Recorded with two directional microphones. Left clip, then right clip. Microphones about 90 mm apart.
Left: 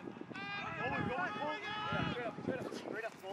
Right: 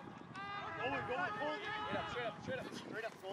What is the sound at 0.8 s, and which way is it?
Vehicle, 25° right (ahead or behind).